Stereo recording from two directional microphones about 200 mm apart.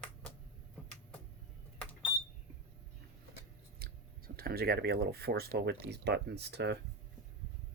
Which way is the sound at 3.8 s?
50° right (ahead or behind).